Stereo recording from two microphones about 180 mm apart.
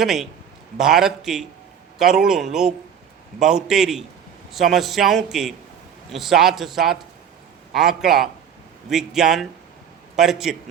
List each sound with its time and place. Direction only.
0.0 s a man's voice: centre (ahead or behind)